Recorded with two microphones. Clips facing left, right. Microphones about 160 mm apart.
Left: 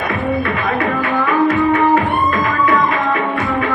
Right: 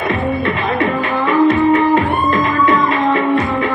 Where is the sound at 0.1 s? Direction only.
25° right (ahead or behind).